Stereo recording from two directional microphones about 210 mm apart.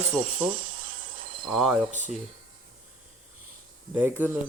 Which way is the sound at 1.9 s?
35° right (ahead or behind).